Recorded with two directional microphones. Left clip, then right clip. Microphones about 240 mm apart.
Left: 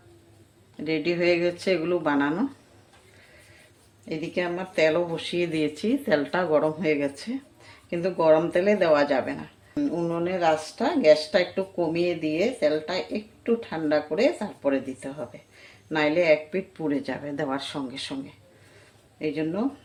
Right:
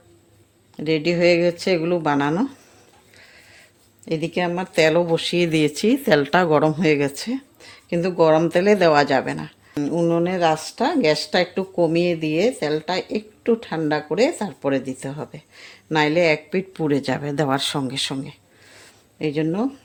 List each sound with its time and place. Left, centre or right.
0.9 s speech: right
4.1 s speech: right